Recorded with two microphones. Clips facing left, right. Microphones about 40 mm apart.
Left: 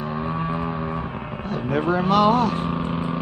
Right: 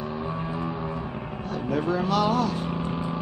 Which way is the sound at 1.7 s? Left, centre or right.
Left.